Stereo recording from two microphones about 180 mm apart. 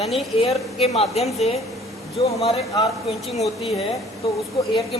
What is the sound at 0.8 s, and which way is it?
Speech, 35° left (ahead or behind).